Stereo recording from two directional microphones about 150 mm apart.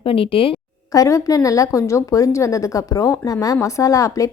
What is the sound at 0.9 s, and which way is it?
A woman's voice, 20° left (ahead or behind).